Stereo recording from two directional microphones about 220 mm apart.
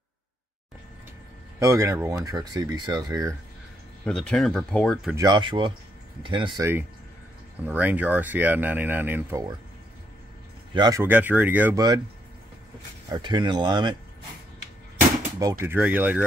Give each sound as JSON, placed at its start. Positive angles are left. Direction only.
{"t": 1.6, "sound": "speech", "side_deg": -15}
{"t": 4.0, "sound": "speech", "side_deg": 5}
{"t": 5.1, "sound": "speech", "side_deg": -20}
{"t": 7.6, "sound": "speech", "side_deg": -5}
{"t": 10.7, "sound": "speech", "side_deg": -20}
{"t": 13.1, "sound": "speech", "side_deg": -20}
{"t": 15.3, "sound": "speech", "side_deg": -15}